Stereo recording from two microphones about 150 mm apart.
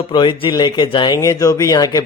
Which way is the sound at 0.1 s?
35° left (ahead or behind).